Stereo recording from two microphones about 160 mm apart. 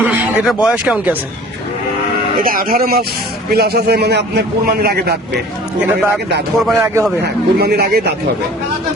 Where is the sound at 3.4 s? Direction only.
75° right (ahead or behind).